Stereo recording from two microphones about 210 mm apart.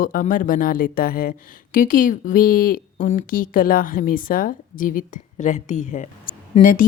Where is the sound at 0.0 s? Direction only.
40° left (ahead or behind).